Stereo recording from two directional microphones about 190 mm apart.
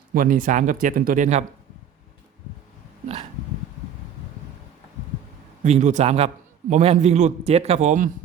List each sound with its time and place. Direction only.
0.1 s speech: 45° right (ahead or behind)
5.6 s a man's voice: 40° right (ahead or behind)